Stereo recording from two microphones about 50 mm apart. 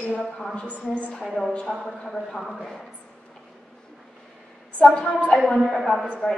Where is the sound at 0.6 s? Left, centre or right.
Left.